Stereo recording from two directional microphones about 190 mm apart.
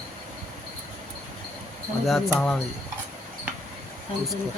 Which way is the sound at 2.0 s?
Centre (ahead or behind).